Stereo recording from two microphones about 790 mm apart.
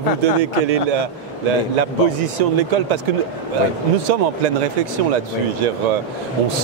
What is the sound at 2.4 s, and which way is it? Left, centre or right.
Speech, right.